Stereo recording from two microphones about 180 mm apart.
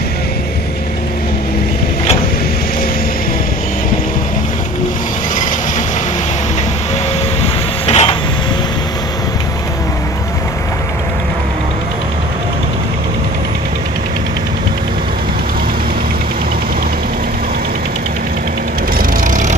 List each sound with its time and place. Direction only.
7.8 s printer: 35° left (ahead or behind)